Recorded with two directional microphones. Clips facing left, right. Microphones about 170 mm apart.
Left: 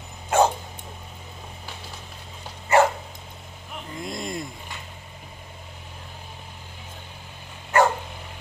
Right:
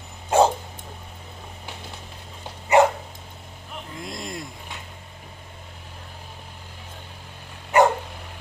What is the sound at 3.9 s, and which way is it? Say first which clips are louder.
Vehicle: left 3 dB; centre (ahead or behind).